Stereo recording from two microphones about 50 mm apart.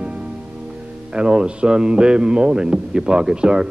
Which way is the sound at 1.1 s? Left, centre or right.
Centre.